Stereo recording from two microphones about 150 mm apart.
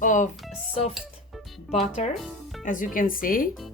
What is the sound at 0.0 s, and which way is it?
Speech, 60° left (ahead or behind).